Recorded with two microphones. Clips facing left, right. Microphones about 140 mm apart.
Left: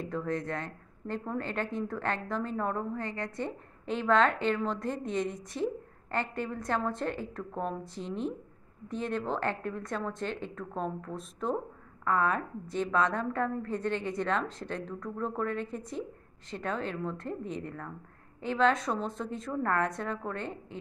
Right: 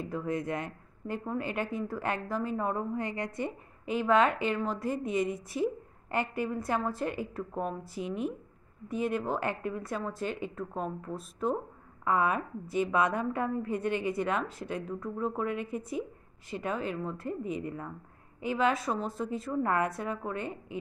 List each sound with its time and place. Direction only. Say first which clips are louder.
0.0 s a woman's voice: even; 10° right (ahead or behind)